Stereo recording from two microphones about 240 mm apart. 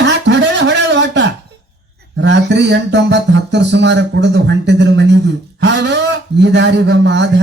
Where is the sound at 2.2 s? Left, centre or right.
Right.